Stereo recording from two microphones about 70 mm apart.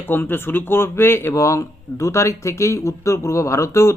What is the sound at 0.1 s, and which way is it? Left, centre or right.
Speech, left.